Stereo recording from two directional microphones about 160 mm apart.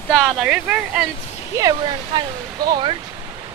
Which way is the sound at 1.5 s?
25° right (ahead or behind).